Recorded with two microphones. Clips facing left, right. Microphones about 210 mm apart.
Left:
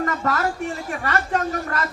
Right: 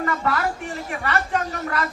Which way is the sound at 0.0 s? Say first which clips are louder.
Left 1 dB; 40° left (ahead or behind).